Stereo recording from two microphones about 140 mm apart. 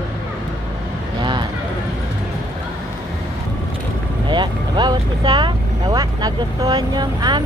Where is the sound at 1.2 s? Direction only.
35° right (ahead or behind).